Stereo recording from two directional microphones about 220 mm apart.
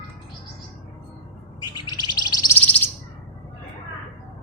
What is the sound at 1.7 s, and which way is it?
Bird, 20° left (ahead or behind).